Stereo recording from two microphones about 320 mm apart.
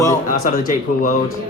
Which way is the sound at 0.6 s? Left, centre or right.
Left.